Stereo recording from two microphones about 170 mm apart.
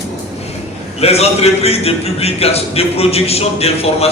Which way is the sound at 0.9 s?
35° left (ahead or behind).